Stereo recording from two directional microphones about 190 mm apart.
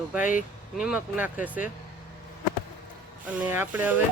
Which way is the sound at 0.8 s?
5° right (ahead or behind).